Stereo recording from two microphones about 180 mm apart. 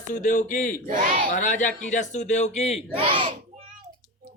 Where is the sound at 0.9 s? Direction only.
50° right (ahead or behind).